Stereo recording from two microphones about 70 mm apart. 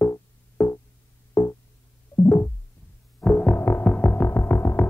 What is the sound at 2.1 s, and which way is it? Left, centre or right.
Music, left.